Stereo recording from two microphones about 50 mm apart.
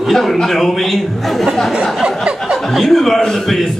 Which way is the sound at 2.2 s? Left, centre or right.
Centre.